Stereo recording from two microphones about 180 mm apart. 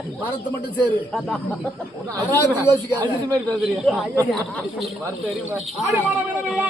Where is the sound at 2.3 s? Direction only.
15° left (ahead or behind).